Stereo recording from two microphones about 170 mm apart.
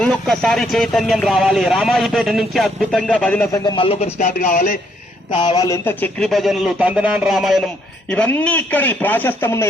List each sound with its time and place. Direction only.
0.0 s speech: 5° left (ahead or behind)
3.5 s speech: 20° left (ahead or behind)
3.8 s speech: 40° left (ahead or behind); by 4.8 s 55° left (ahead or behind)
5.3 s a man's voice: 25° left (ahead or behind)